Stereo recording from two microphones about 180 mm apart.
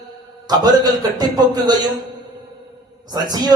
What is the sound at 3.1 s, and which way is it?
Speech, 20° right (ahead or behind).